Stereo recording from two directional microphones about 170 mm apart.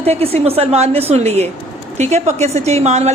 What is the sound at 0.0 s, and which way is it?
A woman's voice, 35° right (ahead or behind).